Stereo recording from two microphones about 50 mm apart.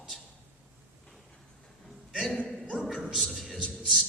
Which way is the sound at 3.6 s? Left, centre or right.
Centre.